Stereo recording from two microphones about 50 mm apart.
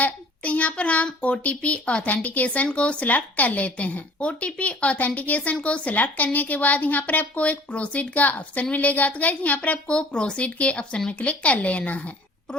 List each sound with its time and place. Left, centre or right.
0.0 s speech: left
2.0 s a woman's voice: left